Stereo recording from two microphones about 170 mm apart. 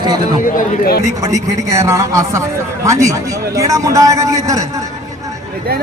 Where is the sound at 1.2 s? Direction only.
20° right (ahead or behind).